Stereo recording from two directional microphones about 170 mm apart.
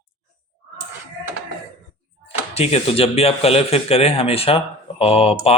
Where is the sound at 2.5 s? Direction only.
35° left (ahead or behind).